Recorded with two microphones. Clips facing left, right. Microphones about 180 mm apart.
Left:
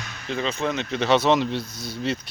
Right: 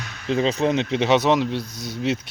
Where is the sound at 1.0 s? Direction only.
15° right (ahead or behind).